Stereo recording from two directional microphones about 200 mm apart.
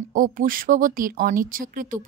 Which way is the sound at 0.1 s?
45° right (ahead or behind).